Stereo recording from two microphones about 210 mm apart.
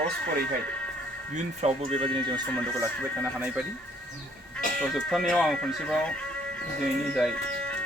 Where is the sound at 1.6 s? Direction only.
25° right (ahead or behind).